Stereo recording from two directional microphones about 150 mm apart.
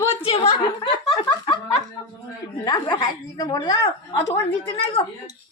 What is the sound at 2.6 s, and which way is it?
Speech, 25° left (ahead or behind).